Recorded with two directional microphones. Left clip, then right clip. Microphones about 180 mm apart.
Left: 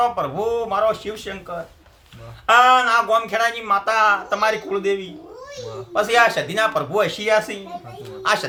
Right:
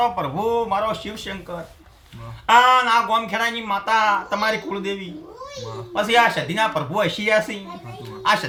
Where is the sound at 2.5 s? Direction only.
15° left (ahead or behind).